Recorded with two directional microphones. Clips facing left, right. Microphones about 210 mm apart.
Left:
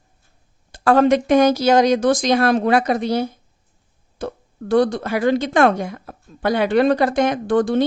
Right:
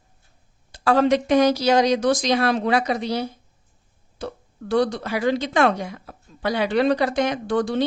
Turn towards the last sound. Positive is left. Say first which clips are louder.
# left 5 dB
turn(degrees=50)  # may be behind; listen again after turning